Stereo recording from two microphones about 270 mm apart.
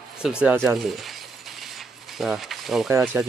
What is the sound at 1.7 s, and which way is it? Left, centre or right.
Pulleys, centre.